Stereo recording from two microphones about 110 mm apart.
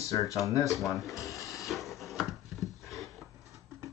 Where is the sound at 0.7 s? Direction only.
Centre (ahead or behind).